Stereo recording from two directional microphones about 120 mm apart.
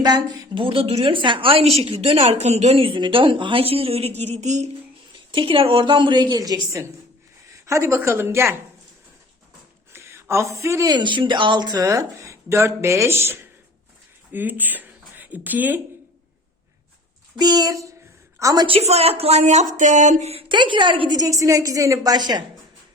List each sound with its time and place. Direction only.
0.0 s a woman's voice: 40° right (ahead or behind); by 4.3 s 60° right (ahead or behind)
4.4 s speech: 75° right (ahead or behind)
5.3 s a woman's voice: 45° right (ahead or behind); by 8.5 s 20° right (ahead or behind)
9.9 s speech: 20° right (ahead or behind)
17.3 s a woman's voice: 35° right (ahead or behind)
18.6 s speech: 55° right (ahead or behind); by 20.3 s 85° right
20.3 s a woman's voice: 40° right (ahead or behind)
21.2 s speech: 25° right (ahead or behind)